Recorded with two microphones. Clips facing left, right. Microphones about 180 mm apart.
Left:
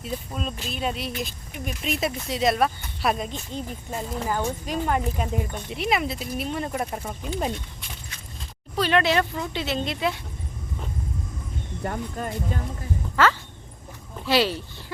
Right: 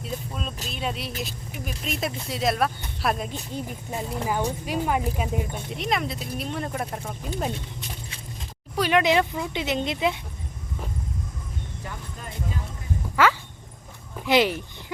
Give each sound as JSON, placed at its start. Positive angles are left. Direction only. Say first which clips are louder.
{"t": 0.0, "sound": "speech", "louder": "left 2 dB", "side_deg": 0}
{"t": 8.7, "sound": "a woman's voice", "louder": "right 1 dB", "side_deg": -10}
{"t": 11.8, "sound": "speech", "louder": "left 9 dB", "side_deg": 50}
{"t": 13.2, "sound": "a sound", "louder": "even", "side_deg": -10}
{"t": 14.3, "sound": "a woman's voice", "louder": "right 1 dB", "side_deg": -15}